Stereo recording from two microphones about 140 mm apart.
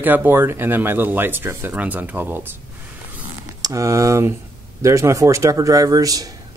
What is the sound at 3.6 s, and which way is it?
Speech, 25° right (ahead or behind).